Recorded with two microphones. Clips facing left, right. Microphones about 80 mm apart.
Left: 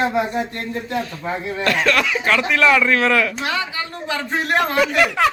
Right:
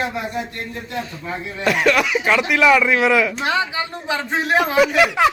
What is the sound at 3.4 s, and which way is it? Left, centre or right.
Speech, right.